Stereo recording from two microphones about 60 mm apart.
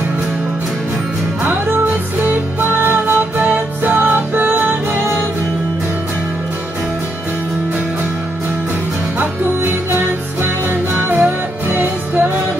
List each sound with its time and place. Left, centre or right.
1.4 s music: right
9.2 s music: right